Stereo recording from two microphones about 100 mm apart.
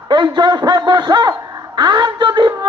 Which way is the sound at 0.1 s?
45° right (ahead or behind).